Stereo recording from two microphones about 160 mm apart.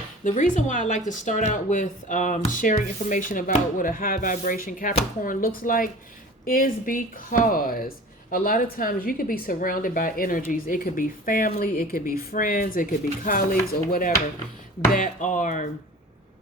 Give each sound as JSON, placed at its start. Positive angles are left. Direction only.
{"t": 0.3, "sound": "a woman's voice", "side_deg": 50}